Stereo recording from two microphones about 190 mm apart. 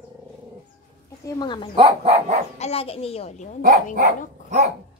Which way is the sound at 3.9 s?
40° right (ahead or behind).